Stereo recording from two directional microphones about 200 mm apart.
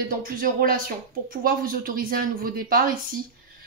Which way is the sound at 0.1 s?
45° right (ahead or behind).